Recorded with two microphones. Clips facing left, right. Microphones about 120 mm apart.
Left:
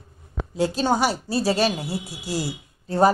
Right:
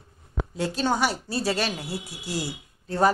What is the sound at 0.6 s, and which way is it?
Speech, 10° left (ahead or behind).